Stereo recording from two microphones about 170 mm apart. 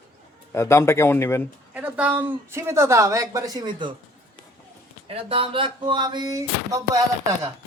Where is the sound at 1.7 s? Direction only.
10° right (ahead or behind); by 3.9 s 25° right (ahead or behind).